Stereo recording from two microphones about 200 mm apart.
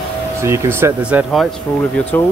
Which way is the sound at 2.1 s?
10° left (ahead or behind).